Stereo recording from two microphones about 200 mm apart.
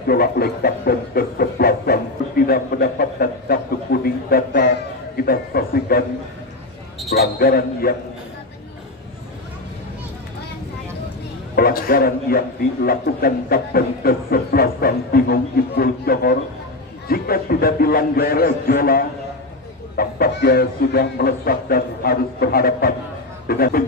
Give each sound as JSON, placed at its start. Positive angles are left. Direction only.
{"t": 0.0, "sound": "a sound", "side_deg": 50}
{"t": 7.1, "sound": "a man's voice", "side_deg": 50}
{"t": 11.5, "sound": "a man's voice", "side_deg": 45}